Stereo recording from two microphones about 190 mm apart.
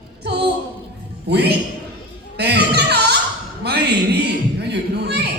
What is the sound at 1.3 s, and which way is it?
Music, 60° right (ahead or behind).